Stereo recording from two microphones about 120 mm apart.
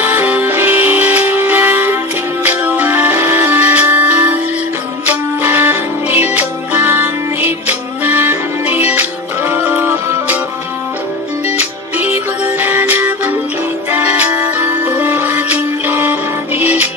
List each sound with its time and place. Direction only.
0.0 s music: 15° right (ahead or behind)
11.5 s music: 15° right (ahead or behind)